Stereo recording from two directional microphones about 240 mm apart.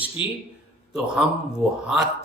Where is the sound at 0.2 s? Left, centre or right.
Centre.